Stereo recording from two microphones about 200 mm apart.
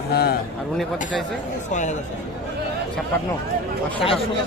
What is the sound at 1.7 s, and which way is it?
Speech, 40° left (ahead or behind).